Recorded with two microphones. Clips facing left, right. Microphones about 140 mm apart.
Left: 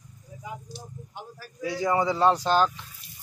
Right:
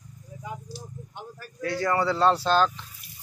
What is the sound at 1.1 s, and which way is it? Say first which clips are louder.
Speech: even; 10° left (ahead or behind).